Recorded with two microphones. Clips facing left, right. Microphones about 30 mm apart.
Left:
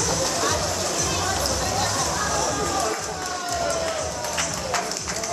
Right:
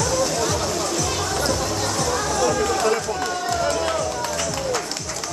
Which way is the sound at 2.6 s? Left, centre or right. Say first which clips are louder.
Right 5 dB; right.